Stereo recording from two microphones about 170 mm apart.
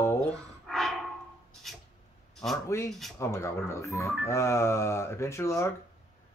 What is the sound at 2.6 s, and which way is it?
Speech, 15° left (ahead or behind).